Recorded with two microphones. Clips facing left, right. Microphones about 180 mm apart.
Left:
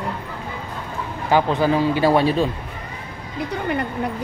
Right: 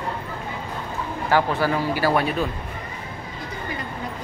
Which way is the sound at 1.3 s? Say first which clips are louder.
Left 3 dB; 20° left (ahead or behind).